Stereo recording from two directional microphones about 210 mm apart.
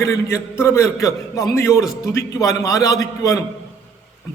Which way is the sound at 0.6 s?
15° left (ahead or behind).